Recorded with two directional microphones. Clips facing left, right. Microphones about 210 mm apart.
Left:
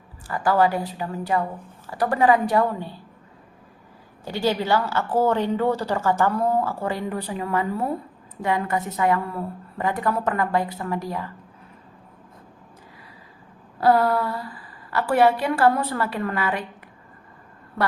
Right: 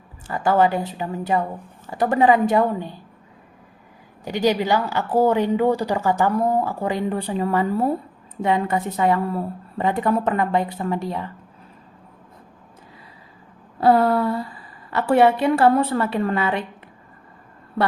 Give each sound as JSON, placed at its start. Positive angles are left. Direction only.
{"t": 0.3, "sound": "a woman's voice", "side_deg": -20}
{"t": 4.3, "sound": "a woman's voice", "side_deg": -15}
{"t": 13.7, "sound": "a woman's voice", "side_deg": -25}